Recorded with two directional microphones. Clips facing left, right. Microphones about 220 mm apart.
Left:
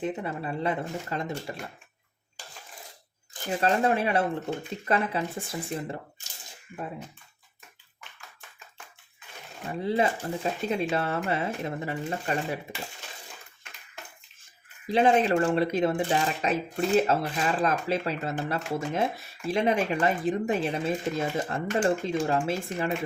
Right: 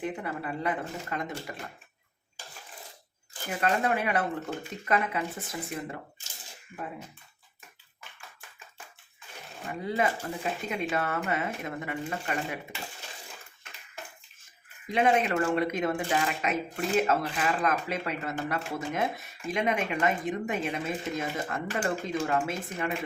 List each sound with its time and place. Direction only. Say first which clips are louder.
0.0 s speech: left 2 dB; 25° left (ahead or behind)
3.5 s speech: left 3 dB; 30° left (ahead or behind)
9.8 s speech: left 3 dB; 30° left (ahead or behind)
14.8 s speech: left 3 dB; 30° left (ahead or behind)